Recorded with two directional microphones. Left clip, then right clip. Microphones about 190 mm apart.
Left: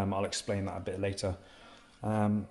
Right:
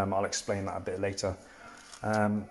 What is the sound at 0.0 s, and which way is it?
Speech, 15° left (ahead or behind).